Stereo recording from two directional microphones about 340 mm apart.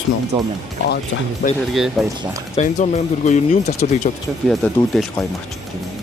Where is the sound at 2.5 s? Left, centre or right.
Centre.